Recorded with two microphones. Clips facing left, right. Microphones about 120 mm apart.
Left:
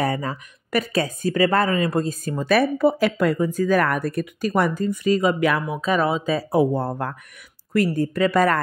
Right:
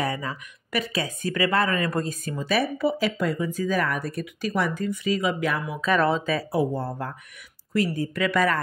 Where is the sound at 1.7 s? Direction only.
25° left (ahead or behind).